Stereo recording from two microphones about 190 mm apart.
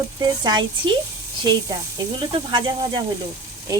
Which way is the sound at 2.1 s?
25° right (ahead or behind).